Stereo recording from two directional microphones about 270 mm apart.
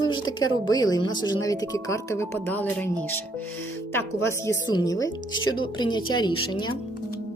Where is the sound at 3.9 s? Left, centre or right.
Centre.